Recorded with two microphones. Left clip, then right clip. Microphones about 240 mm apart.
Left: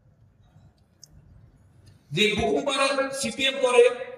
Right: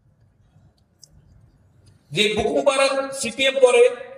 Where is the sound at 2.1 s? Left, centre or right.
Right.